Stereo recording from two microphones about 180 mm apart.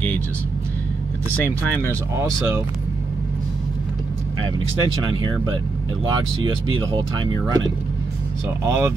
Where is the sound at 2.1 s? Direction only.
15° right (ahead or behind).